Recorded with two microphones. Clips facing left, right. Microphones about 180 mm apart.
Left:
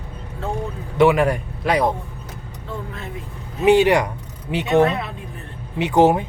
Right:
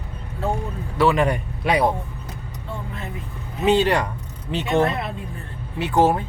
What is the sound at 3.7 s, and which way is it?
Speech, 15° left (ahead or behind).